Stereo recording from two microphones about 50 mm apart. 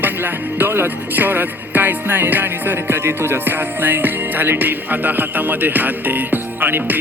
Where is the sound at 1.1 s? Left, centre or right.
Right.